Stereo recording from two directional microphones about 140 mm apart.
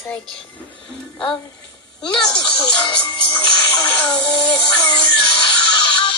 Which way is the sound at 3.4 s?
30° left (ahead or behind).